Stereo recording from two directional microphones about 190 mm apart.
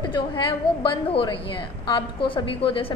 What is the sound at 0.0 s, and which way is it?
A woman's voice, 25° left (ahead or behind).